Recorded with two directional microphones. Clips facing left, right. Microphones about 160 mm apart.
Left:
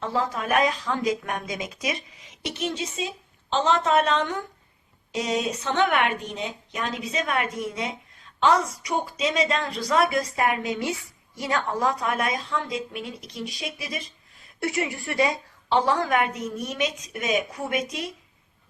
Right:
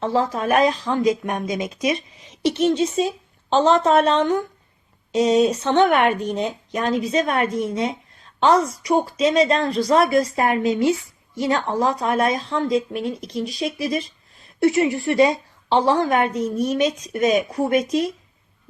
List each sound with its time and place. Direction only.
0.0 s speech: 30° right (ahead or behind)
2.4 s a woman's voice: 35° right (ahead or behind)